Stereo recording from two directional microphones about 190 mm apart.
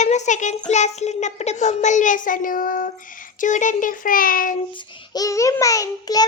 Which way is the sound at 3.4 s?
40° left (ahead or behind).